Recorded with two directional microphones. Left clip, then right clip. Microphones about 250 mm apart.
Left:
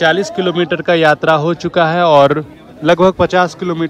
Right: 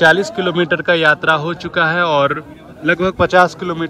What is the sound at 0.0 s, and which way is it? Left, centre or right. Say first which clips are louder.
Speech: right 1 dB; centre.